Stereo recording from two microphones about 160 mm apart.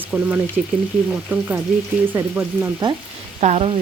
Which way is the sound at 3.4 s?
45° right (ahead or behind).